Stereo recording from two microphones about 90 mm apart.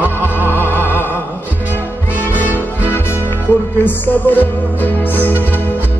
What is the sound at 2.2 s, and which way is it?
Music, 20° left (ahead or behind).